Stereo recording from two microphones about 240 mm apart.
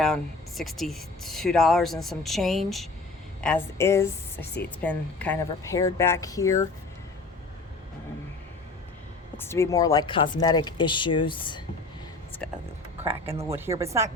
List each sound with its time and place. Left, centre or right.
0.0 s speech: centre
9.4 s speech: centre
13.4 s a woman's voice: centre